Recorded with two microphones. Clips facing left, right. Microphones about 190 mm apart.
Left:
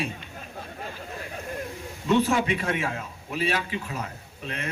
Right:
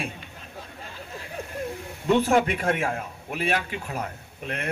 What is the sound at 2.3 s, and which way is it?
Speech, 55° right (ahead or behind).